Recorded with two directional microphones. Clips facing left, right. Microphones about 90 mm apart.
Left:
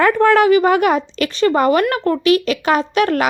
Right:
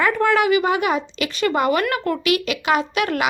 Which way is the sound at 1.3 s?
30° left (ahead or behind).